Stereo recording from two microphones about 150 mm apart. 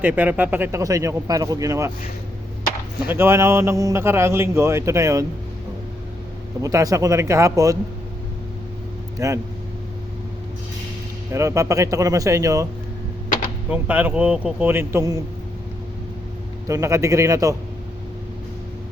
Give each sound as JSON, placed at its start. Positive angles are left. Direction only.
{"t": 0.0, "sound": "speech", "side_deg": -10}
{"t": 3.1, "sound": "speech", "side_deg": -15}
{"t": 6.6, "sound": "speech", "side_deg": -20}
{"t": 9.1, "sound": "speech", "side_deg": -20}
{"t": 11.3, "sound": "speech", "side_deg": -20}
{"t": 13.7, "sound": "speech", "side_deg": -10}
{"t": 16.6, "sound": "speech", "side_deg": -20}